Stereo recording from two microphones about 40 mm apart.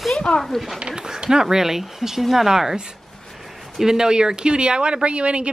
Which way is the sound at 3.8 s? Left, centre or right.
Centre.